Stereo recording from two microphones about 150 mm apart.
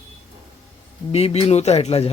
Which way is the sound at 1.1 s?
45° left (ahead or behind).